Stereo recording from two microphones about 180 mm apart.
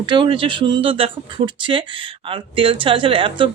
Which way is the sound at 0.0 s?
25° right (ahead or behind).